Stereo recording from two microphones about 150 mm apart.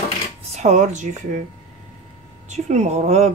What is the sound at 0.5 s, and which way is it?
Speech, 50° right (ahead or behind).